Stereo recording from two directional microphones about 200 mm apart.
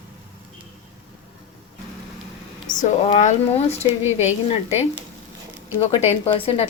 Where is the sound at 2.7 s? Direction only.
35° left (ahead or behind).